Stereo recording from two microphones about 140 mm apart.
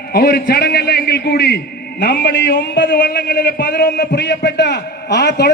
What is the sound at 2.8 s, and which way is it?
A man's voice, 90° left.